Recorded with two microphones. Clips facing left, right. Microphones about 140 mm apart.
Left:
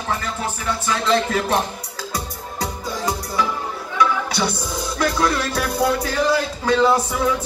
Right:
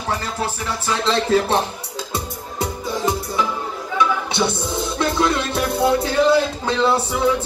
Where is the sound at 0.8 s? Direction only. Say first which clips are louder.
Right 1 dB; 30° right (ahead or behind).